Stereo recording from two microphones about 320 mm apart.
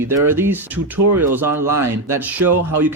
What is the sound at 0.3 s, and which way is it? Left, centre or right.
A man's voice, centre.